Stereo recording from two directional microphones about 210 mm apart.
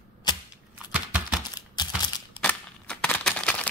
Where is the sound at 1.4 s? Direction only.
20° left (ahead or behind).